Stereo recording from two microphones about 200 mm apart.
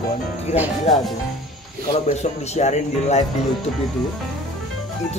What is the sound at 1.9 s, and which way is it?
A man's voice, 35° left (ahead or behind).